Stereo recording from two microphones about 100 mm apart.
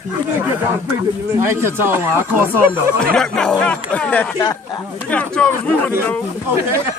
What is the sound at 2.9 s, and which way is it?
Speech, 10° left (ahead or behind).